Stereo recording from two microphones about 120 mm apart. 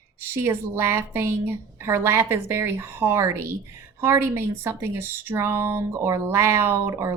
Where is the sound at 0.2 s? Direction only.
20° right (ahead or behind).